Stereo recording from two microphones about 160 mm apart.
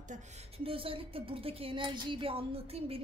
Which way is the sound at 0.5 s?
35° right (ahead or behind).